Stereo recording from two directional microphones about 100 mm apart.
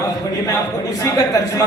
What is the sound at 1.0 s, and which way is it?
Speech, 35° left (ahead or behind).